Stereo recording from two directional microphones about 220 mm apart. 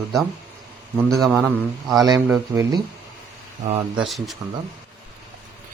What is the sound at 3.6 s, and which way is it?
Speech, 35° right (ahead or behind).